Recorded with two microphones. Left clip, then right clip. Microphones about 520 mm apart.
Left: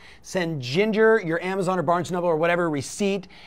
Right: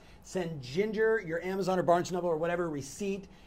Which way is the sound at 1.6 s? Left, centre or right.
Left.